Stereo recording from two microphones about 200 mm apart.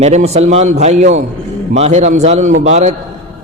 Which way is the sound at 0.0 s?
35° right (ahead or behind).